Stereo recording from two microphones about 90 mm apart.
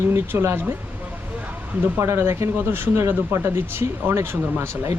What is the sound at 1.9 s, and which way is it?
Speech, 30° right (ahead or behind).